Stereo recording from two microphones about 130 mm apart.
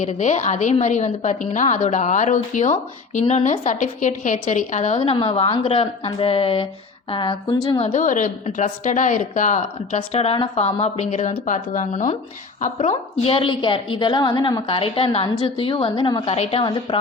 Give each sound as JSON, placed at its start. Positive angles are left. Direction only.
{"t": 0.0, "sound": "a woman's voice", "side_deg": 60}
{"t": 3.2, "sound": "speech", "side_deg": 65}
{"t": 3.7, "sound": "a woman's voice", "side_deg": 70}
{"t": 7.8, "sound": "a woman's voice", "side_deg": 50}
{"t": 8.0, "sound": "a woman's voice", "side_deg": 80}
{"t": 9.6, "sound": "speech", "side_deg": 55}
{"t": 12.8, "sound": "a woman's voice", "side_deg": 50}
{"t": 16.3, "sound": "a woman's voice", "side_deg": 50}
{"t": 16.6, "sound": "speech", "side_deg": 40}